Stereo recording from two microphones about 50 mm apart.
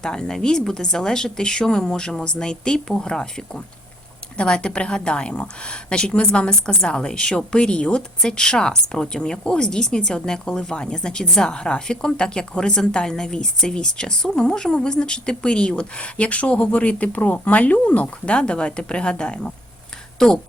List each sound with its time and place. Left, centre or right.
0.0 s a woman's voice: centre